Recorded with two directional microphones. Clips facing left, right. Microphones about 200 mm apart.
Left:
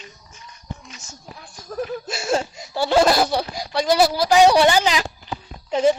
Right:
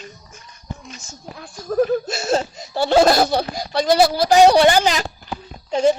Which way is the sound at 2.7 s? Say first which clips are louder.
Right 2 dB; 20° right (ahead or behind).